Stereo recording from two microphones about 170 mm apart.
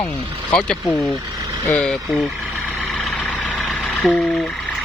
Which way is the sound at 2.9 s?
5° left (ahead or behind).